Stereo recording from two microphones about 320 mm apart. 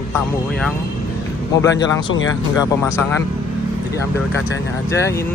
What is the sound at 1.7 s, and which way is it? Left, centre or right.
Speech, left.